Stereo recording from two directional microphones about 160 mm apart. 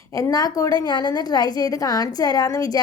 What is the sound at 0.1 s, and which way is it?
A woman's voice, 20° left (ahead or behind).